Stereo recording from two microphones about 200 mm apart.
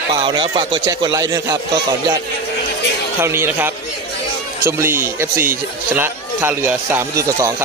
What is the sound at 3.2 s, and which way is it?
Speech, 10° right (ahead or behind).